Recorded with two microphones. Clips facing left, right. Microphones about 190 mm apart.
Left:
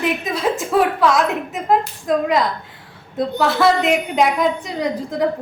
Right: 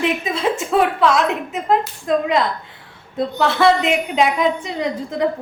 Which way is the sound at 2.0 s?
Centre (ahead or behind).